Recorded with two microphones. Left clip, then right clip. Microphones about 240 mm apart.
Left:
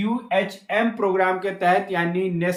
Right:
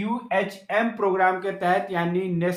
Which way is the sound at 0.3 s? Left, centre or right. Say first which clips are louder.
Left 2 dB; centre.